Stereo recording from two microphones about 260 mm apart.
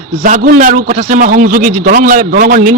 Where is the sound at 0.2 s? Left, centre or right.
Right.